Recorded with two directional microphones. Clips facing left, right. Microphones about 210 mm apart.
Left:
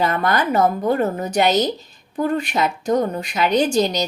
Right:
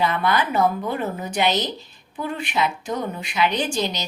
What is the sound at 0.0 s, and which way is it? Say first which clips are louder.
A woman's voice: left 2 dB; 45° left (ahead or behind).